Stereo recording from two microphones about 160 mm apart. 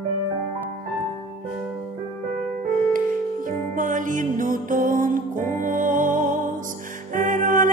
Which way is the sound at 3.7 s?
55° right (ahead or behind).